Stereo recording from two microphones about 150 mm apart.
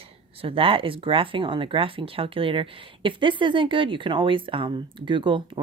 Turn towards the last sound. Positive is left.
turn(degrees=-35)  # may be behind; listen again after turning